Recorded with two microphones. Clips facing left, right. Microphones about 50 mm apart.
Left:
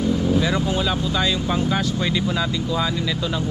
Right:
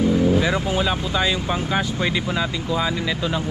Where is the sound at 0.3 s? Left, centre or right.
Right.